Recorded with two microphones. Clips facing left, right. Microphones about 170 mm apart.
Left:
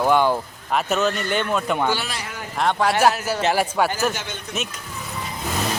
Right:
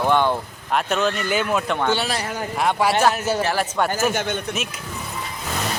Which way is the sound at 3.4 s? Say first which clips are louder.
Left 2 dB; 15° left (ahead or behind).